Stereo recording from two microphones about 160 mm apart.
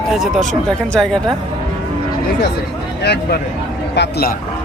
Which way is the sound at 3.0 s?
90° left.